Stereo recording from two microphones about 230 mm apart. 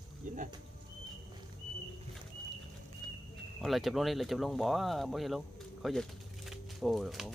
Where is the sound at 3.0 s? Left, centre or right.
Centre.